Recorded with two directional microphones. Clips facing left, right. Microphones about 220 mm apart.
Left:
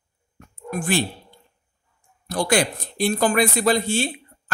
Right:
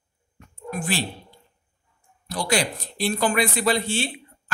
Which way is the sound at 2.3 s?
50° left (ahead or behind).